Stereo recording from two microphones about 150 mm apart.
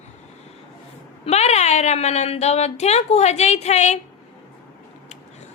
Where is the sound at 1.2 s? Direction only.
45° left (ahead or behind).